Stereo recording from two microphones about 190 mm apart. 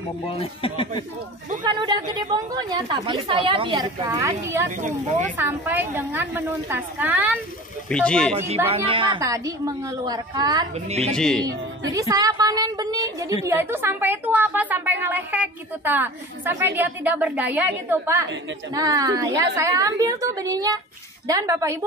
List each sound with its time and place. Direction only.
0.4 s speech: 30° left (ahead or behind)
1.6 s a woman's voice: 25° right (ahead or behind)
4.2 s speech: 15° right (ahead or behind)
4.6 s speech: 40° right (ahead or behind)
5.4 s speech: 10° right (ahead or behind)
7.9 s speech: 5° left (ahead or behind)
8.6 s a woman's voice: 30° right (ahead or behind)
10.7 s speech: 35° right (ahead or behind)
11.1 s speech: 5° left (ahead or behind)
11.4 s speech: 20° right (ahead or behind)